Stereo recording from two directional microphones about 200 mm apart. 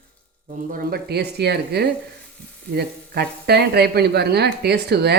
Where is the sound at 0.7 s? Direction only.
45° right (ahead or behind).